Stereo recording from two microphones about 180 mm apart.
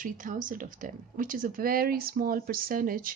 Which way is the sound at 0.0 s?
50° right (ahead or behind).